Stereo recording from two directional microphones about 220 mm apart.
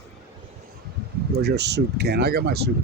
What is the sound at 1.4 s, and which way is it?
Speech, 50° right (ahead or behind).